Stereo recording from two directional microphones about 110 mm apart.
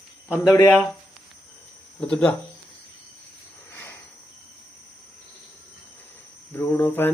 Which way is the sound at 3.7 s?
15° left (ahead or behind).